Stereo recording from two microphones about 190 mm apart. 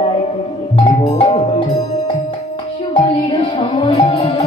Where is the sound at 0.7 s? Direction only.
25° left (ahead or behind).